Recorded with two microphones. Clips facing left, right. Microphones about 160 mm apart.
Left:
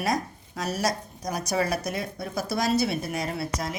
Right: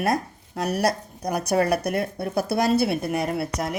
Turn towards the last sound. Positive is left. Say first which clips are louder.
# right 4 dB
turn(degrees=-60)  # may be behind; listen again after turning